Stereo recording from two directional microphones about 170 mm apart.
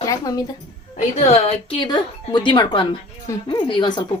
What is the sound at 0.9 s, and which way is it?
Speech, 40° left (ahead or behind).